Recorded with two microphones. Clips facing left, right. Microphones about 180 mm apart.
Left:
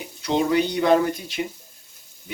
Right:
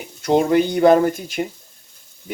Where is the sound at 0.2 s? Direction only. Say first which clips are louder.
Right 5 dB; 50° right (ahead or behind).